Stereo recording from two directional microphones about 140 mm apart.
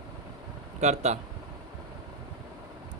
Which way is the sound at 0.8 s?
55° right (ahead or behind).